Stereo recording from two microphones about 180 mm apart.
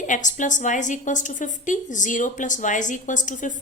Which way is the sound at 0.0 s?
45° left (ahead or behind).